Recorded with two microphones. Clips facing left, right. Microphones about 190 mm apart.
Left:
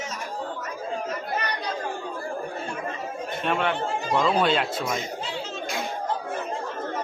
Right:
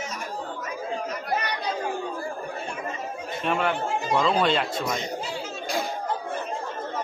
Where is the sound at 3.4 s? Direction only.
Centre (ahead or behind).